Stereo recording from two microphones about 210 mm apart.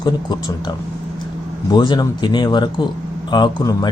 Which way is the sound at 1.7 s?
20° left (ahead or behind).